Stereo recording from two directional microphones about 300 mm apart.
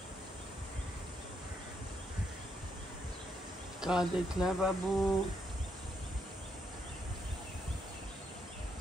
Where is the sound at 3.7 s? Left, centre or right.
Centre.